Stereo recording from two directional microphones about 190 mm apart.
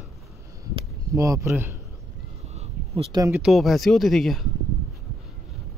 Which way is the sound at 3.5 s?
Centre (ahead or behind).